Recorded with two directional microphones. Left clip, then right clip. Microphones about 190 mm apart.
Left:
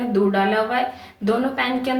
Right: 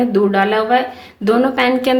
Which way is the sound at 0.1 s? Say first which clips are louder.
Right 5 dB; 50° right (ahead or behind).